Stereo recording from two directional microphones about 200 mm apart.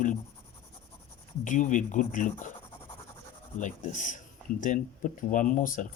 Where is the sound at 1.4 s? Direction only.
40° left (ahead or behind).